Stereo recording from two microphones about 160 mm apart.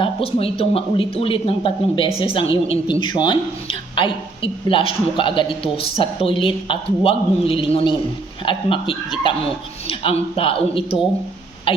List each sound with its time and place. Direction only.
0.0 s a woman's voice: 35° left (ahead or behind)